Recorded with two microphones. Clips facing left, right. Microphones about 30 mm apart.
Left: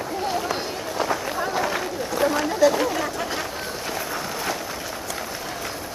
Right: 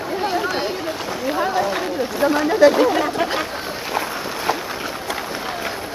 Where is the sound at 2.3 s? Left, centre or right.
Right.